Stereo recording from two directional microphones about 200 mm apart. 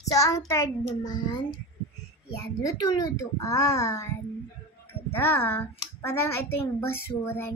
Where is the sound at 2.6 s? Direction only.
15° left (ahead or behind).